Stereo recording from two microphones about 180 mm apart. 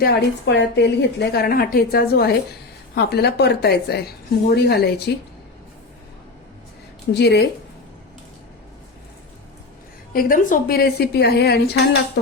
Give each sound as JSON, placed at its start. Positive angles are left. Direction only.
{"t": 0.0, "sound": "a woman's voice", "side_deg": 75}
{"t": 7.1, "sound": "speech", "side_deg": 70}
{"t": 10.1, "sound": "a woman's voice", "side_deg": 50}